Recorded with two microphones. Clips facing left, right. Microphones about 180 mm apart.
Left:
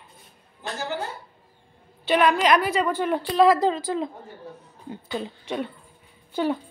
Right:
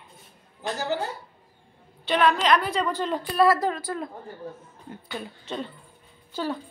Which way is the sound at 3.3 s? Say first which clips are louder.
Left 3 dB; 20° left (ahead or behind).